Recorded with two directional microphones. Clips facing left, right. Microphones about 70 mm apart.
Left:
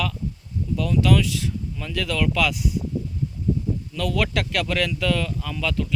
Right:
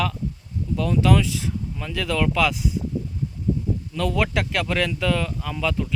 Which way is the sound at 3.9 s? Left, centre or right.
Right.